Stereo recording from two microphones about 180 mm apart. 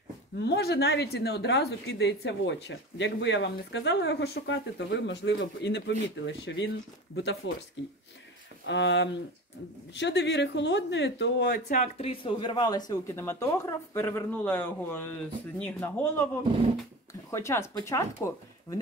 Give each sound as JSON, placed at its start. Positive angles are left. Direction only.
{"t": 0.4, "sound": "a woman's voice", "side_deg": 65}
{"t": 8.6, "sound": "a woman's voice", "side_deg": 85}
{"t": 11.7, "sound": "speech", "side_deg": 30}